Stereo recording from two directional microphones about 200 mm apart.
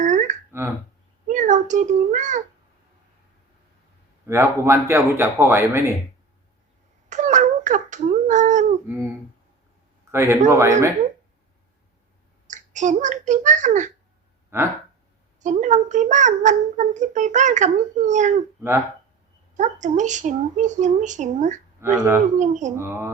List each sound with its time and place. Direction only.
0.0 s a sound: 35° right (ahead or behind)
1.3 s a child's voice: 40° right (ahead or behind)
4.3 s a man's voice: 15° right (ahead or behind)
7.1 s a sound: 40° right (ahead or behind)
10.1 s a man's voice: 15° right (ahead or behind)
12.5 s speech: 40° right (ahead or behind)
14.5 s a man's voice: 10° right (ahead or behind)
15.4 s a child's voice: 35° right (ahead or behind)
19.5 s a child's voice: 35° right (ahead or behind)
21.8 s speech: 10° right (ahead or behind)
22.4 s a child's voice: 35° right (ahead or behind)
22.7 s a man's voice: 10° right (ahead or behind)